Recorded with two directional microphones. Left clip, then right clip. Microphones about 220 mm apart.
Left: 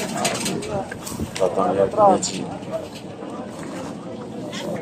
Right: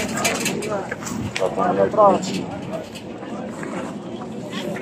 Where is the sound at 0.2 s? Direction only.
50° right (ahead or behind).